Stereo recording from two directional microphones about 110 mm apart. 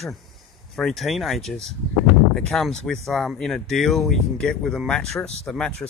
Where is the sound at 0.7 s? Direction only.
Centre (ahead or behind).